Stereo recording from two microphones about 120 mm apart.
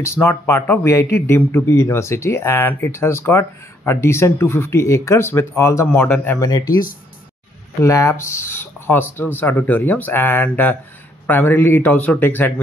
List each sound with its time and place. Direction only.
0.0 s speech: 20° left (ahead or behind)
6.4 s speech: 30° left (ahead or behind)
7.8 s speech: 25° left (ahead or behind)